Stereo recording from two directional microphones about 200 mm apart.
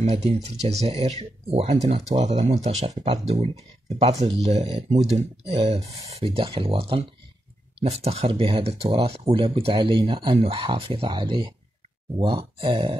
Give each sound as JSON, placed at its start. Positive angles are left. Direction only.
{"t": 0.0, "sound": "speech", "side_deg": -30}
{"t": 12.5, "sound": "speech", "side_deg": -25}